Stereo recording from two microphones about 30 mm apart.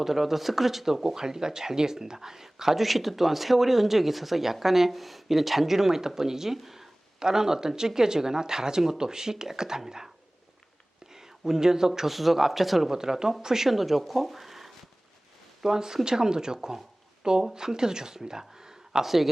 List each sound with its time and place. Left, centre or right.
0.0 s speech: centre
7.2 s speech: centre
11.0 s a sound: centre
12.1 s speech: centre
12.9 s speech: centre
13.7 s speech: centre
15.6 s speech: centre
19.0 s speech: centre